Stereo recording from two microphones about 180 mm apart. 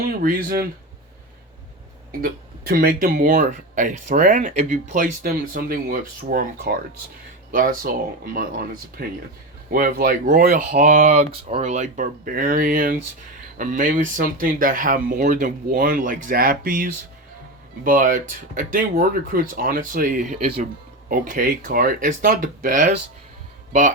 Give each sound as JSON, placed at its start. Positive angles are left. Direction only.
{"t": 0.0, "sound": "speech", "side_deg": -55}
{"t": 2.2, "sound": "speech", "side_deg": -55}